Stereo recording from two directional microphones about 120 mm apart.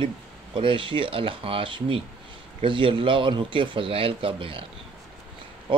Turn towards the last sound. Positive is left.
turn(degrees=-45)  # may be behind; listen again after turning